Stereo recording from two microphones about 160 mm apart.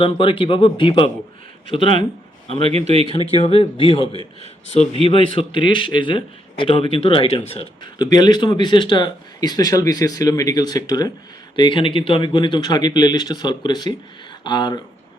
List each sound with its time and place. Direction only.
0.0 s speech: 35° left (ahead or behind)
2.6 s speech: 40° right (ahead or behind)
3.3 s a man's voice: 35° left (ahead or behind)